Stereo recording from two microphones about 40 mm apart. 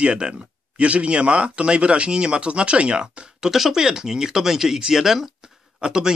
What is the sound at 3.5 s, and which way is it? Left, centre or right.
Speech, centre.